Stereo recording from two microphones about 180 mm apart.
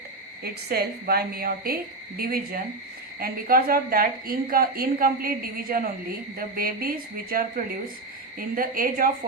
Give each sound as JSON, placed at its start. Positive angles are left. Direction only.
{"t": 0.4, "sound": "a woman's voice", "side_deg": -60}